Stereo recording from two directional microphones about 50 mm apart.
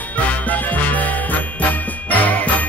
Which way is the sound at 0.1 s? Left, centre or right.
Left.